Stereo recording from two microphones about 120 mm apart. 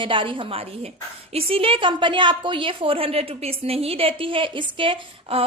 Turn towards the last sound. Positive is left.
turn(degrees=-50)  # may be behind; listen again after turning